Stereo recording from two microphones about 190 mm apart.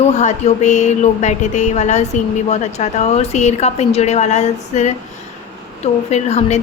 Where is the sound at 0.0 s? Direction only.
35° left (ahead or behind).